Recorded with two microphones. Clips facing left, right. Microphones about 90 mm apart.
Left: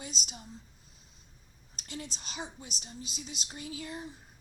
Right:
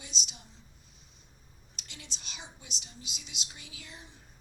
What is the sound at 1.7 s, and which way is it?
Speech, 40° left (ahead or behind).